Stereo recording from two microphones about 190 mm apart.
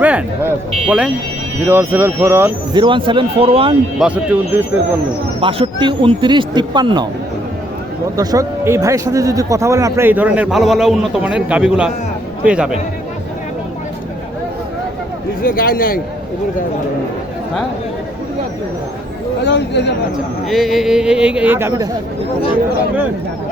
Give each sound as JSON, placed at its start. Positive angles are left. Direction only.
{"t": 0.0, "sound": "speech", "side_deg": -5}
{"t": 2.7, "sound": "speech", "side_deg": -25}
{"t": 3.9, "sound": "speech", "side_deg": -5}
{"t": 5.4, "sound": "speech", "side_deg": -30}
{"t": 8.1, "sound": "speech", "side_deg": -20}
{"t": 15.4, "sound": "a man's voice", "side_deg": 50}
{"t": 19.5, "sound": "speech", "side_deg": 65}
{"t": 20.5, "sound": "speech", "side_deg": 0}